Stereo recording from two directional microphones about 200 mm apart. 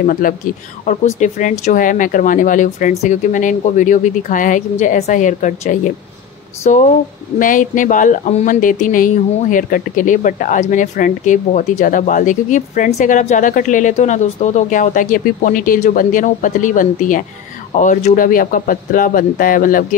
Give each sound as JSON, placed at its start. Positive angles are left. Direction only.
{"t": 0.0, "sound": "speech", "side_deg": 45}